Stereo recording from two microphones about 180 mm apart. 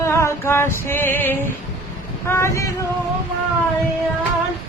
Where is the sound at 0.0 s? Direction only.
15° left (ahead or behind).